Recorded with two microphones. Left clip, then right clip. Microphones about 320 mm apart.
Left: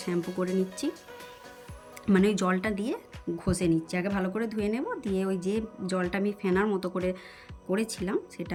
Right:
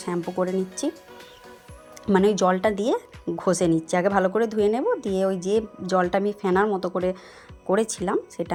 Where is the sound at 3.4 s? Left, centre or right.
Right.